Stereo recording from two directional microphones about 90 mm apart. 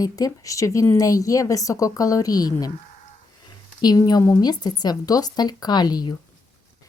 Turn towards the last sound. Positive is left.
turn(degrees=50)  # may be behind; listen again after turning